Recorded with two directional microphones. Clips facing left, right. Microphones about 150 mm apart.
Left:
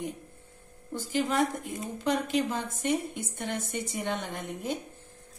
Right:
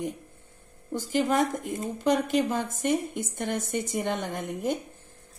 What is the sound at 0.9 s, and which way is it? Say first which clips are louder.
A woman's voice: right 3 dB; 50° right (ahead or behind).